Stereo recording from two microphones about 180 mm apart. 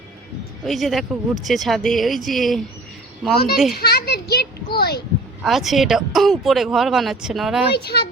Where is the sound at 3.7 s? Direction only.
60° left (ahead or behind).